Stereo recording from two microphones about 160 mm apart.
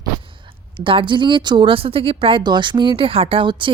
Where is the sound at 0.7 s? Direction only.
35° right (ahead or behind).